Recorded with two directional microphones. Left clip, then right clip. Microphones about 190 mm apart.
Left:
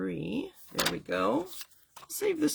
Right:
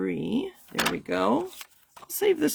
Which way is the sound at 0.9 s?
45° right (ahead or behind).